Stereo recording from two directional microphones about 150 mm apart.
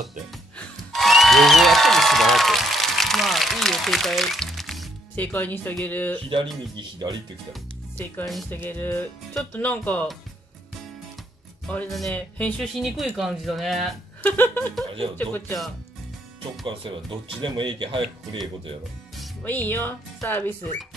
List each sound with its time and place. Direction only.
0.3 s applause: centre (ahead or behind)
5.1 s speech: 10° left (ahead or behind)
6.8 s speech: 25° right (ahead or behind)
8.5 s speech: 15° left (ahead or behind)
11.6 s speech: 5° left (ahead or behind)
14.2 s speech: 10° left (ahead or behind)
16.6 s speech: 35° right (ahead or behind)
19.4 s speech: 10° left (ahead or behind)